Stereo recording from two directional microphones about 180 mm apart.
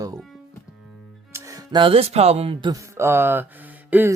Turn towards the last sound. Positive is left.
turn(degrees=-10)  # may be behind; listen again after turning